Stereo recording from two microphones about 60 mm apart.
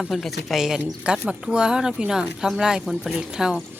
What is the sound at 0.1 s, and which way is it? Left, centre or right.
Speech, centre.